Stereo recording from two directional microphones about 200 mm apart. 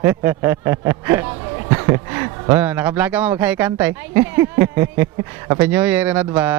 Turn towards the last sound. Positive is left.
turn(degrees=-10)  # may be behind; listen again after turning